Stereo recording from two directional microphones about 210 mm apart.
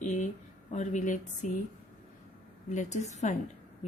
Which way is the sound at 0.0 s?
35° left (ahead or behind).